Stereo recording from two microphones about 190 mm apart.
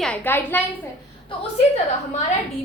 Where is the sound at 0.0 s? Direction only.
10° left (ahead or behind).